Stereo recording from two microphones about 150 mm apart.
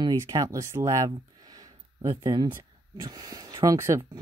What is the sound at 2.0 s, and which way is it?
Speech, 35° right (ahead or behind).